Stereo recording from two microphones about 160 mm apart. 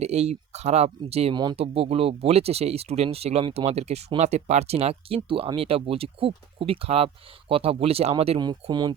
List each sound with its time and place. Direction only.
0.0 s speech: 40° right (ahead or behind)
8.4 s speech: 25° right (ahead or behind)